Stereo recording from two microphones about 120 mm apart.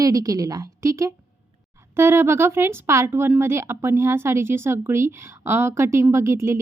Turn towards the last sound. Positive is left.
turn(degrees=-25)  # may be behind; listen again after turning